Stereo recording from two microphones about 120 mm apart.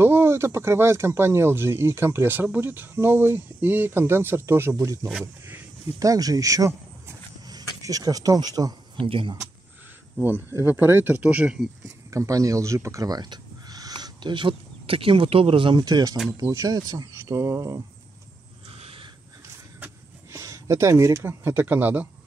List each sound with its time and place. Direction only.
0.0 s speech: 20° right (ahead or behind)
8.9 s speech: 45° right (ahead or behind)
10.2 s speech: 20° right (ahead or behind)
12.1 s speech: 25° right (ahead or behind)
18.7 s a sound: 50° right (ahead or behind)
19.8 s a sound: 25° right (ahead or behind)